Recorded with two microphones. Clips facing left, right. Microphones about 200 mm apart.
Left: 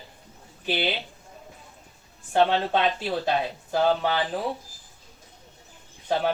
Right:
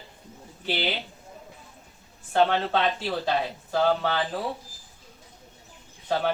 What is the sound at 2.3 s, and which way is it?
Speech, 15° left (ahead or behind).